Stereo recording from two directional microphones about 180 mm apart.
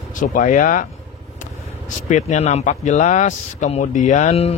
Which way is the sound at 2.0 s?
40° left (ahead or behind).